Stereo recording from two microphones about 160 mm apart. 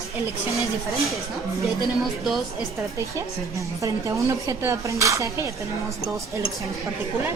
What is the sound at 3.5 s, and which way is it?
Speech, 20° right (ahead or behind).